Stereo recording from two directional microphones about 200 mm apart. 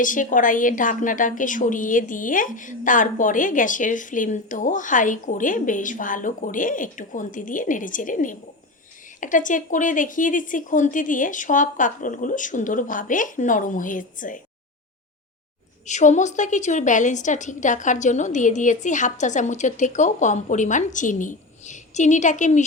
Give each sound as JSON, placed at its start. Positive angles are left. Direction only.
{"t": 0.0, "sound": "a woman's voice", "side_deg": 40}
{"t": 15.9, "sound": "a woman's voice", "side_deg": 35}